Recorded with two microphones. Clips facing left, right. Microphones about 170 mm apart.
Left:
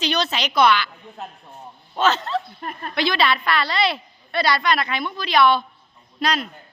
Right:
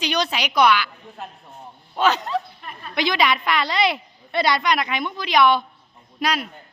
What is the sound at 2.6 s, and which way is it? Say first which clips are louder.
Speech: left 6 dB; 50° left (ahead or behind).